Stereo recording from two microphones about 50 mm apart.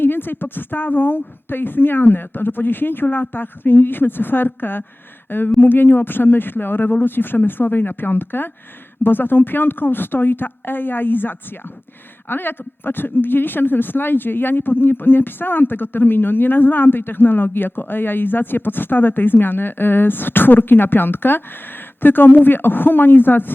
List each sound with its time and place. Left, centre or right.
0.0 s speech: left